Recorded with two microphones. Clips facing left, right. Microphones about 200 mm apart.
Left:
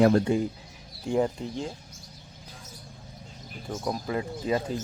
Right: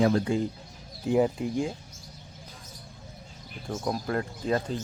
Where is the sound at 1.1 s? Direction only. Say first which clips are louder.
Right 2 dB; 5° right (ahead or behind).